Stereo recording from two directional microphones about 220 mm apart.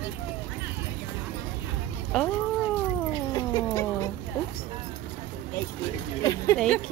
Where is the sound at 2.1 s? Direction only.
5° left (ahead or behind).